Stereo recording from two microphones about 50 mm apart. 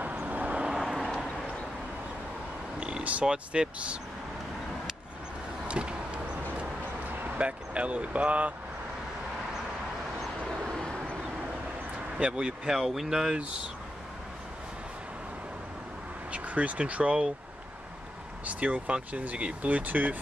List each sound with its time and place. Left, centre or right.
0.0 s vehicle: right
0.6 s vehicle: centre
3.0 s vehicle: right
3.3 s speech: right
5.7 s vehicle: right
7.2 s speech: right
10.6 s vehicle: centre
12.2 s speech: centre
12.6 s speech: centre
16.3 s speech: right
18.4 s speech: right